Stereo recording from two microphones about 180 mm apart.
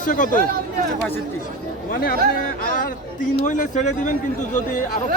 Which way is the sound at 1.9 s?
55° left (ahead or behind).